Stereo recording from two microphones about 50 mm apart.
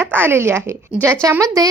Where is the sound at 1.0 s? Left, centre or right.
Right.